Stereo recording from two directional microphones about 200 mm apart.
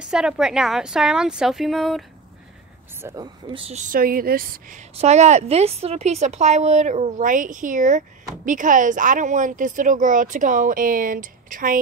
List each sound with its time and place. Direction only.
0.0 s a woman's voice: 5° right (ahead or behind)
3.0 s speech: 15° right (ahead or behind); by 11.8 s 45° right (ahead or behind)